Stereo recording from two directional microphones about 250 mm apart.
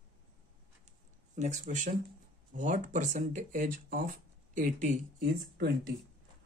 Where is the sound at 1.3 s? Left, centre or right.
Right.